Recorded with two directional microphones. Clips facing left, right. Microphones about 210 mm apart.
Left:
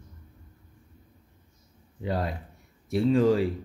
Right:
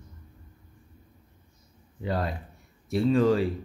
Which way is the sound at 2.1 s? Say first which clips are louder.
Even; 15° left (ahead or behind).